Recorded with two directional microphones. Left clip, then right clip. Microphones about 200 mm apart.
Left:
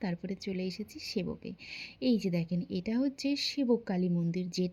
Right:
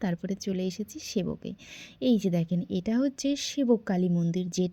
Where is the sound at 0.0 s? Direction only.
30° right (ahead or behind).